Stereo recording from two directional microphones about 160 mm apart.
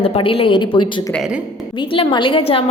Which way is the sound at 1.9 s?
30° left (ahead or behind).